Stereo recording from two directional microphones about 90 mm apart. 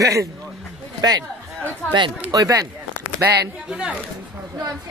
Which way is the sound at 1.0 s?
50° right (ahead or behind).